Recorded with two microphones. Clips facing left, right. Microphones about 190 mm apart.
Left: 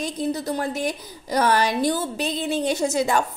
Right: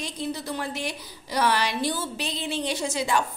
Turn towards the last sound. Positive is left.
turn(degrees=45)  # may be behind; listen again after turning